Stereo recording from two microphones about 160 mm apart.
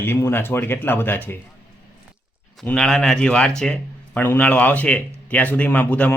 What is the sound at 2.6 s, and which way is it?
Speech, 5° left (ahead or behind).